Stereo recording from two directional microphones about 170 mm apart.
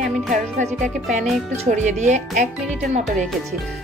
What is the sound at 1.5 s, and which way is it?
Speech, 45° right (ahead or behind).